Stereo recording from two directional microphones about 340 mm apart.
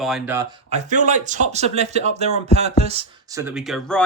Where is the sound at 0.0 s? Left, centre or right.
Centre.